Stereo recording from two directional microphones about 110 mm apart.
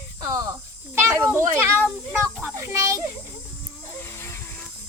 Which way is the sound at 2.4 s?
25° right (ahead or behind).